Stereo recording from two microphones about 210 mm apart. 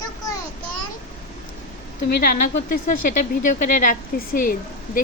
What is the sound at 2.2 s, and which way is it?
Speech, 40° left (ahead or behind).